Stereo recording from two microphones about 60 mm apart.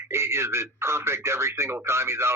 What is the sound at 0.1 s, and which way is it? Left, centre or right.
Speech, right.